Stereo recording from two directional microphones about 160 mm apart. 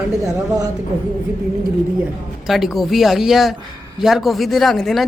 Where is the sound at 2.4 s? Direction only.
Centre (ahead or behind).